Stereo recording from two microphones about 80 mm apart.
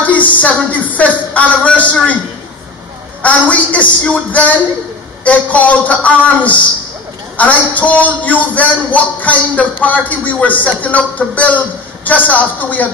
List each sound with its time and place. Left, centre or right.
0.0 s a man's voice: centre
3.2 s a man's voice: centre